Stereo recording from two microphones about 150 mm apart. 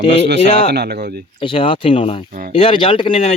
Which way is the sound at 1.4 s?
35° left (ahead or behind).